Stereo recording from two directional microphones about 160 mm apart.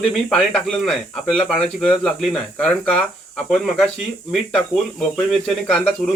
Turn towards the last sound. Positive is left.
turn(degrees=5)  # may be behind; listen again after turning